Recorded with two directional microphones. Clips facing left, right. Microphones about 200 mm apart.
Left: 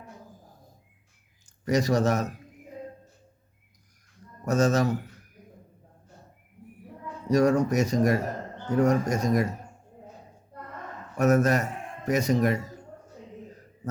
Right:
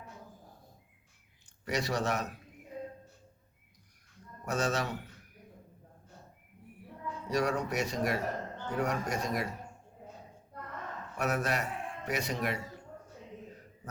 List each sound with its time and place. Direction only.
1.6 s speech: 40° left (ahead or behind)
4.4 s speech: 40° left (ahead or behind)
7.3 s speech: 45° left (ahead or behind)
11.2 s a man's voice: 45° left (ahead or behind)